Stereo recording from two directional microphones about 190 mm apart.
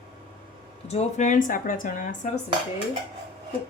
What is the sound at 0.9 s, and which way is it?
A woman's voice, 35° left (ahead or behind).